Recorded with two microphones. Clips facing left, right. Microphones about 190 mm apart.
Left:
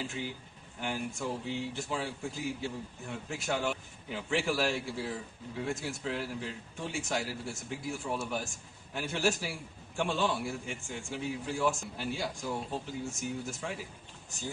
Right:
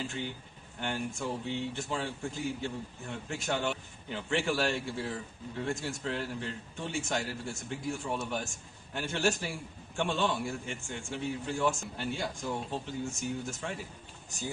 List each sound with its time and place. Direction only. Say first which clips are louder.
0.0 s speech: right 1 dB; centre (ahead or behind)